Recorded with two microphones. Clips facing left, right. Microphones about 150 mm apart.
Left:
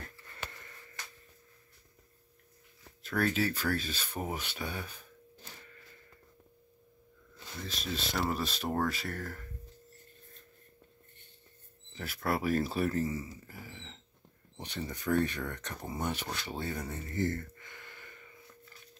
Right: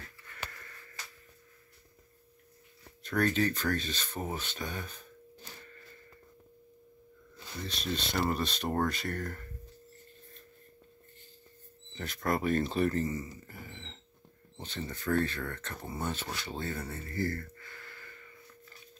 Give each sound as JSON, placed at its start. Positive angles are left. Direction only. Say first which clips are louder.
{"t": 0.3, "sound": "a sound", "louder": "right 3 dB", "side_deg": 20}
{"t": 3.0, "sound": "speech", "louder": "right 2 dB", "side_deg": 5}
{"t": 7.6, "sound": "speech", "louder": "right 2 dB", "side_deg": 0}
{"t": 11.9, "sound": "speech", "louder": "right 1 dB", "side_deg": 5}
{"t": 14.6, "sound": "speech", "louder": "even", "side_deg": 15}
{"t": 16.4, "sound": "a sound", "louder": "even", "side_deg": 10}